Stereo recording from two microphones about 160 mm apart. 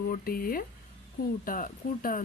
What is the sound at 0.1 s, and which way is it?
Speech, 65° left (ahead or behind).